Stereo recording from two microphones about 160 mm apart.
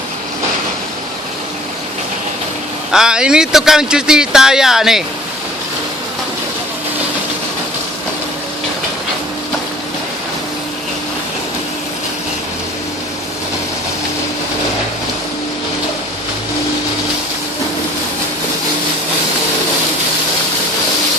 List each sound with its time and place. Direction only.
2.9 s speech: 5° right (ahead or behind)